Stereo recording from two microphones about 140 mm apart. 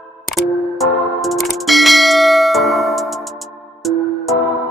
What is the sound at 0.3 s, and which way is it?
Music, centre (ahead or behind).